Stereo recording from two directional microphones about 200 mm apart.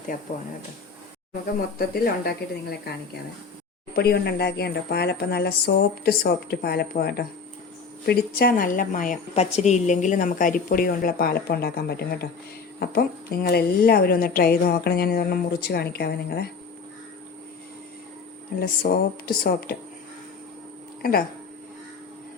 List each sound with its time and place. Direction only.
1.8 s a woman's voice: 50° left (ahead or behind)
3.9 s a woman's voice: 55° left (ahead or behind)
18.6 s a woman's voice: 45° left (ahead or behind)
21.0 s a woman's voice: 50° left (ahead or behind)